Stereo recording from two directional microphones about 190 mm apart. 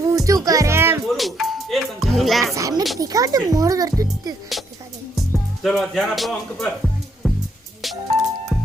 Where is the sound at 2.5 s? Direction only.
15° right (ahead or behind).